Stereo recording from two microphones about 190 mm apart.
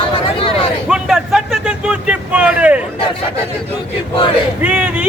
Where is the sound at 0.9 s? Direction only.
Centre (ahead or behind).